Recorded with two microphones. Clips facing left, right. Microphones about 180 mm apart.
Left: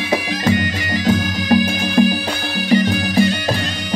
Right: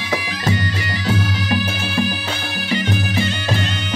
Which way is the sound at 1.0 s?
45° left (ahead or behind).